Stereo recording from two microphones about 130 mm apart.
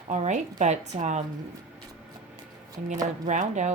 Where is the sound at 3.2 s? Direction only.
65° right (ahead or behind).